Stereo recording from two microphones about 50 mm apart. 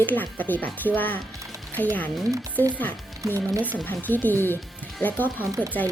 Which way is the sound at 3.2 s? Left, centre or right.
Right.